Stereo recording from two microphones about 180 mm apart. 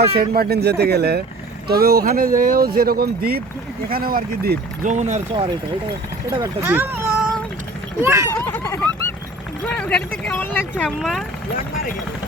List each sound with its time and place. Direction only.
0.2 s speech: 55° right (ahead or behind); by 5.5 s 35° right (ahead or behind)
6.7 s speech: 10° right (ahead or behind)
8.3 s speech: 10° left (ahead or behind)